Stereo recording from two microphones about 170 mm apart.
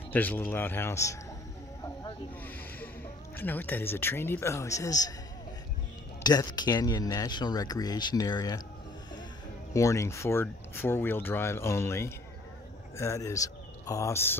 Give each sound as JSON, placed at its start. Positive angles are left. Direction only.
{"t": 0.1, "sound": "speech", "side_deg": 10}
{"t": 2.4, "sound": "speech", "side_deg": 10}
{"t": 6.2, "sound": "speech", "side_deg": 25}
{"t": 9.8, "sound": "speech", "side_deg": 20}